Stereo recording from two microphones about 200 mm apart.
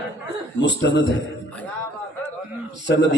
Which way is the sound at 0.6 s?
60° left (ahead or behind).